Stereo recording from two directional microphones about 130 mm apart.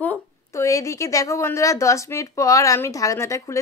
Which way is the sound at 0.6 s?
25° left (ahead or behind).